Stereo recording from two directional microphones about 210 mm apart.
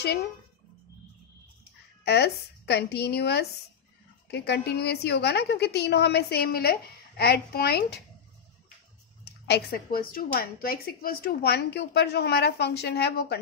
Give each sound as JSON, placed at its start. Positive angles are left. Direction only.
{"t": 0.0, "sound": "speech", "side_deg": 50}
{"t": 2.0, "sound": "speech", "side_deg": 50}
{"t": 9.2, "sound": "speech", "side_deg": 50}